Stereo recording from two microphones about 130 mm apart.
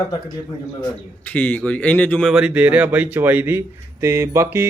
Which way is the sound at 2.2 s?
5° right (ahead or behind).